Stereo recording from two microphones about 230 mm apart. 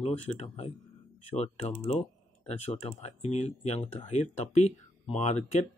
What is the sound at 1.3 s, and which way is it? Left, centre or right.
Speech, left.